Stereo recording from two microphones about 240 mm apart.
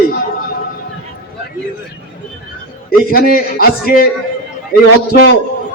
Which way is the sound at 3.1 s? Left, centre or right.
Left.